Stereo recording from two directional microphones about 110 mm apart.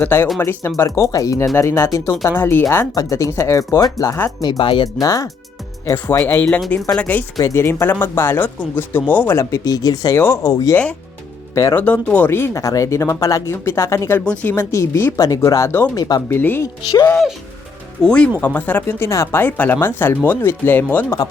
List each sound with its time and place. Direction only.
0.0 s speech: 20° left (ahead or behind)
2.9 s speech: 30° left (ahead or behind); by 4.9 s 45° left (ahead or behind)
4.9 s speech: 30° left (ahead or behind); by 7.3 s 15° left (ahead or behind)
7.3 s speech: 25° left (ahead or behind)
10.2 s speech: 20° left (ahead or behind)
10.5 s speech: 35° left (ahead or behind)
11.8 s speech: 15° left (ahead or behind); by 16.2 s 35° left (ahead or behind)
16.3 s speech: 20° left (ahead or behind)
18.0 s speech: 10° left (ahead or behind)